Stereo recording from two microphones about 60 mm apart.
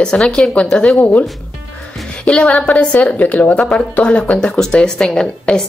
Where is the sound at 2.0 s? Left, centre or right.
Centre.